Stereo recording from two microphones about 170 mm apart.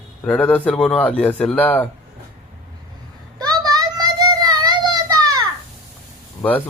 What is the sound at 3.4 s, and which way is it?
Children playing, 20° right (ahead or behind).